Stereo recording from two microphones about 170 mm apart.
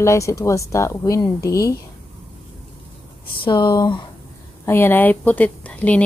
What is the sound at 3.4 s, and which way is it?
Speech, 25° left (ahead or behind).